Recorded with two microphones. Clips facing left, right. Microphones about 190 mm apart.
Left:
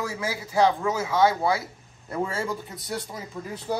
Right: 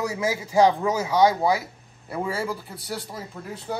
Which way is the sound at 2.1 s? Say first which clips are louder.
Even; 5° right (ahead or behind).